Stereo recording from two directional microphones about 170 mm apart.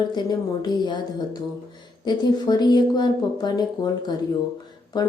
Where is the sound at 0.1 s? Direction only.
25° left (ahead or behind).